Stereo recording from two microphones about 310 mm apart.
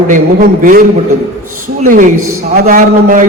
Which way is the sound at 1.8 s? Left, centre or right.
Right.